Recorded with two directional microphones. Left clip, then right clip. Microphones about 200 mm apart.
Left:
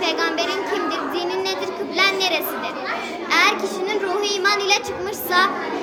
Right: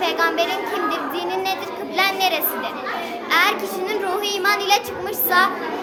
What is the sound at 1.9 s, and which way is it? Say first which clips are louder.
A child's voice: even; 20° right (ahead or behind).